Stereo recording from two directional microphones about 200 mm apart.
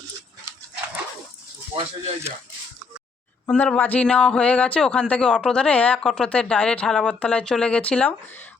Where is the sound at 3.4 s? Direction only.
10° left (ahead or behind).